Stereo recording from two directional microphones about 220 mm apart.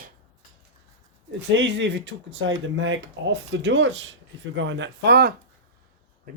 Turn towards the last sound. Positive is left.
turn(degrees=-45)  # may be behind; listen again after turning